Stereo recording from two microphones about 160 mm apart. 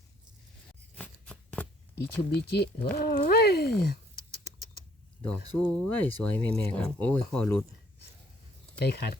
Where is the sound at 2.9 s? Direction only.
75° left (ahead or behind).